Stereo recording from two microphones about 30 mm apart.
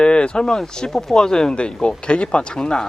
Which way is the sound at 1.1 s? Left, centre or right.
Left.